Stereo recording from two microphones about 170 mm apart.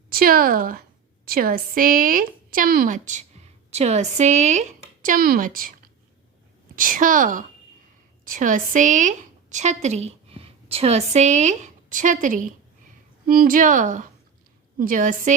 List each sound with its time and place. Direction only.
0.1 s a woman's voice: 60° right (ahead or behind)